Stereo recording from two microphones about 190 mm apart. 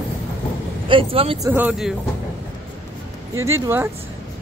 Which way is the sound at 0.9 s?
30° right (ahead or behind).